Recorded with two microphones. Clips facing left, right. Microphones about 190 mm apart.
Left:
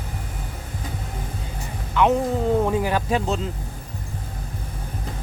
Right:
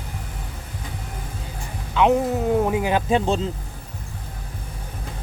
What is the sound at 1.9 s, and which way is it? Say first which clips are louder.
Music: right 1 dB; 10° right (ahead or behind).